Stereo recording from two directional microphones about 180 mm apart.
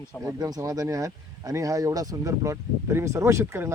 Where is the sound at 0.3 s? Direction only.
20° right (ahead or behind).